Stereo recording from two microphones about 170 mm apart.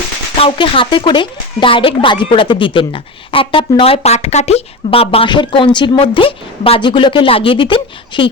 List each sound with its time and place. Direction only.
0.3 s speech: 30° left (ahead or behind)